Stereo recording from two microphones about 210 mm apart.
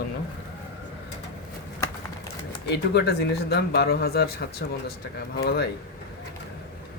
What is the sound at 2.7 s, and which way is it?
Speech, 55° left (ahead or behind).